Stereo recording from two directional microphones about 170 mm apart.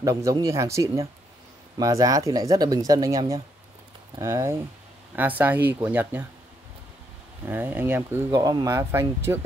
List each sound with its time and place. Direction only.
0.0 s speech: 20° right (ahead or behind)
7.4 s speech: 10° right (ahead or behind)